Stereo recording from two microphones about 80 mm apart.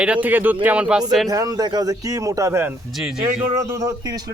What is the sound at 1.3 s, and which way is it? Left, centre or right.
A man's voice, right.